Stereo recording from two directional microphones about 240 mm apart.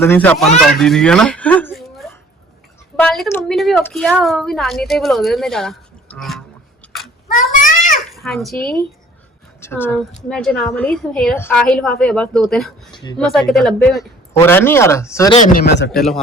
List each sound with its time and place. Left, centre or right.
0.0 s a woman's voice: centre
7.3 s cat: left
8.1 s a child's voice: centre
12.9 s speech: centre
13.1 s a woman's voice: centre
15.4 s a man's voice: left
15.9 s a woman's voice: centre